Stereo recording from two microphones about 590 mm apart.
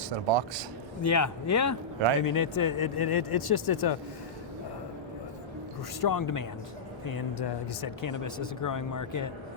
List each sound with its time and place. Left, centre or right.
0.3 s speech: right
1.0 s speech: left
6.0 s speech: left